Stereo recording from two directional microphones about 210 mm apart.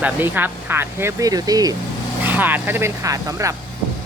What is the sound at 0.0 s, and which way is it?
Speech, 10° right (ahead or behind).